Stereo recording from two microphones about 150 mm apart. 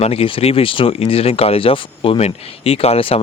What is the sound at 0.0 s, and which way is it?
Speech, 40° left (ahead or behind).